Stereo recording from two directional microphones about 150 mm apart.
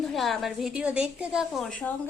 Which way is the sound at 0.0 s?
Centre (ahead or behind).